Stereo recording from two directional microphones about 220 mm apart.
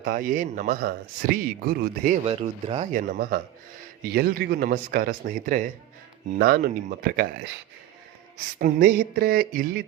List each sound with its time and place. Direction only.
0.0 s a man's voice: 40° right (ahead or behind)
2.2 s speech: 25° right (ahead or behind)
2.9 s a man's voice: 35° right (ahead or behind)
8.5 s a man's voice: 40° right (ahead or behind)